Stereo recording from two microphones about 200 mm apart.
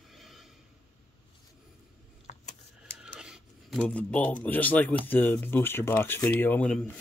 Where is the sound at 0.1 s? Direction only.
Centre (ahead or behind).